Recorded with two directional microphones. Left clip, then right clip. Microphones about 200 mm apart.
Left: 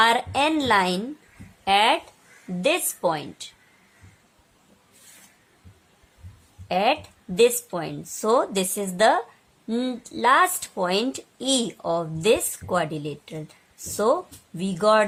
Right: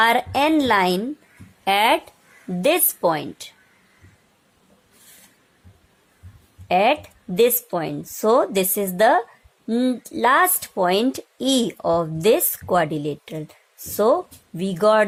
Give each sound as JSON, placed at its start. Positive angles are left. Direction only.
{"t": 0.0, "sound": "a woman's voice", "side_deg": -30}
{"t": 6.7, "sound": "a woman's voice", "side_deg": -30}